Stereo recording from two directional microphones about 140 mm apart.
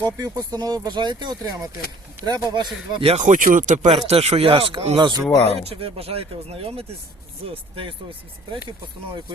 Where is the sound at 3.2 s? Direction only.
65° right (ahead or behind).